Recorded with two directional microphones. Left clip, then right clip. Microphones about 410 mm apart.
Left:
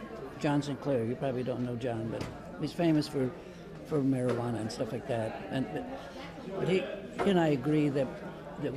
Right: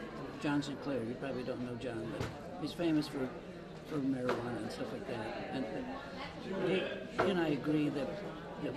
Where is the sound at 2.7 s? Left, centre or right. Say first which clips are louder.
Left 5 dB; left.